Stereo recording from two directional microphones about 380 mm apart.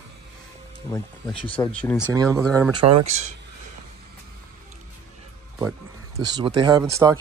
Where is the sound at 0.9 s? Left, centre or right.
Centre.